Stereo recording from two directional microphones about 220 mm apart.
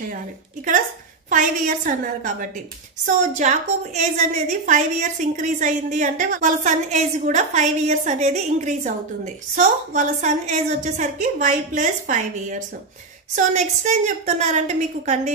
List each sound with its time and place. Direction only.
1.3 s a woman's voice: 35° right (ahead or behind)